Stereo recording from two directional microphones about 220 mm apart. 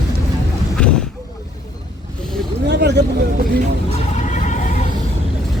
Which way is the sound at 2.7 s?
50° right (ahead or behind).